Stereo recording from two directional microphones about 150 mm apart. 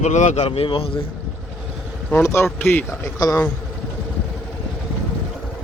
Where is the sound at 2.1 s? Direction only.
15° left (ahead or behind).